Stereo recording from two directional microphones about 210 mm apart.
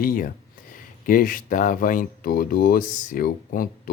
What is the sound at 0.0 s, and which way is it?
Speech, 40° left (ahead or behind).